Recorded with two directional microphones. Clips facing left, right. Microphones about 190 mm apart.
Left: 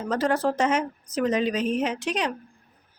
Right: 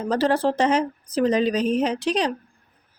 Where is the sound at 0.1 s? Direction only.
30° right (ahead or behind).